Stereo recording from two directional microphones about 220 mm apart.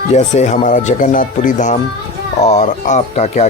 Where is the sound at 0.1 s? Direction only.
30° left (ahead or behind).